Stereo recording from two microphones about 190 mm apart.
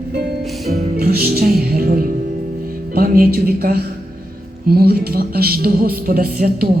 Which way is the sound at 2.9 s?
50° right (ahead or behind).